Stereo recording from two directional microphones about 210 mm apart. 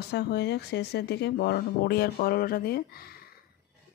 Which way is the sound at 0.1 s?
50° left (ahead or behind).